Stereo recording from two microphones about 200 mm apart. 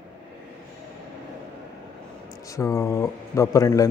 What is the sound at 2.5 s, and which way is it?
A man's voice, 15° left (ahead or behind).